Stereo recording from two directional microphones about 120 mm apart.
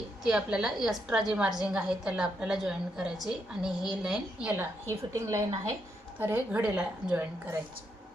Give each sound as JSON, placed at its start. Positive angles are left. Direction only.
{"t": 0.3, "sound": "a woman's voice", "side_deg": -5}
{"t": 4.5, "sound": "a woman's voice", "side_deg": -20}